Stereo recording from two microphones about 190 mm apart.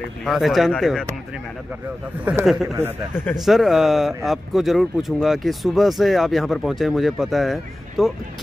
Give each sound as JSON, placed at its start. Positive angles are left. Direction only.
{"t": 0.2, "sound": "speech", "side_deg": 0}
{"t": 2.2, "sound": "speech", "side_deg": -5}